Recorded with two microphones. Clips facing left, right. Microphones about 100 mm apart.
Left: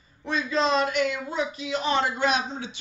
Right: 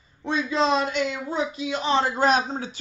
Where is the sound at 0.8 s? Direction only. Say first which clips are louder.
Left 1 dB; 25° right (ahead or behind).